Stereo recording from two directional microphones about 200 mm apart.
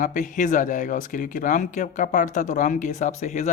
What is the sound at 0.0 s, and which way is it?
Speech, 40° left (ahead or behind).